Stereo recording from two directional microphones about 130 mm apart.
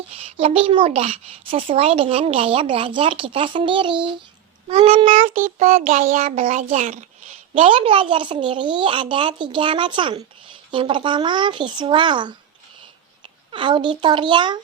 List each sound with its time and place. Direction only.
0.1 s speech: 50° right (ahead or behind)
4.7 s child singing: 45° right (ahead or behind); by 7.7 s 60° right (ahead or behind)
7.7 s speech: 45° right (ahead or behind)
13.5 s speech: 40° right (ahead or behind)